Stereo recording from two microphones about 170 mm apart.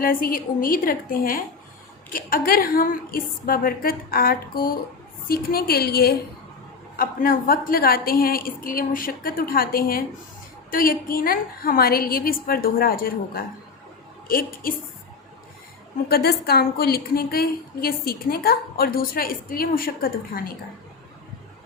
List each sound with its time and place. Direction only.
0.0 s a woman's voice: 55° left (ahead or behind)
16.0 s a woman's voice: 65° left (ahead or behind)